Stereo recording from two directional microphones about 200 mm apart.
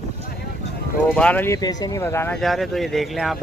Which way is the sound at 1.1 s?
5° left (ahead or behind).